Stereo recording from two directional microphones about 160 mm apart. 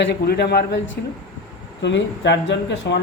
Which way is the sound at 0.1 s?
90° left.